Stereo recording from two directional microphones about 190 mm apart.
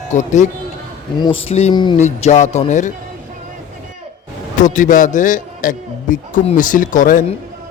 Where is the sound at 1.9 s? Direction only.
40° left (ahead or behind).